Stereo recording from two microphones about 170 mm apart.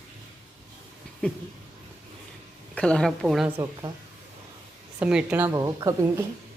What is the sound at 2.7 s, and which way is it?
Speech, 5° left (ahead or behind).